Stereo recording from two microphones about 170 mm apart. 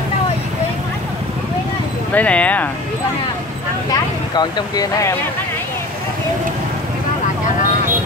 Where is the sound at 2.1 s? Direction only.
10° left (ahead or behind).